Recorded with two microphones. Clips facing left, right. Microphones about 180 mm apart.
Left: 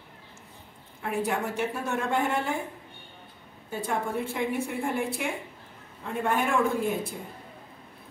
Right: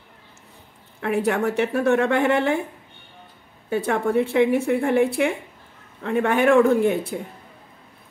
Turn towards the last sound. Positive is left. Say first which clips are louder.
# right 10 dB
turn(degrees=-70)  # may be behind; listen again after turning